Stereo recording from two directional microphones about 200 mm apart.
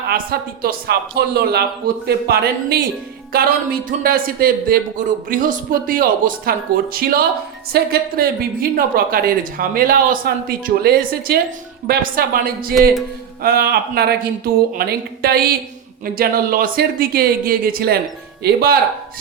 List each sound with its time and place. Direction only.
0.1 s speech: 50° right (ahead or behind)